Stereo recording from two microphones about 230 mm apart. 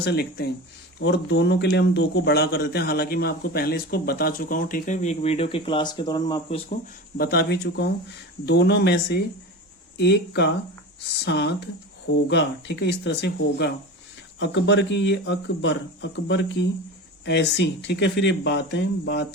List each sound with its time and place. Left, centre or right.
0.0 s speech: left; by 6.6 s centre
7.2 s speech: left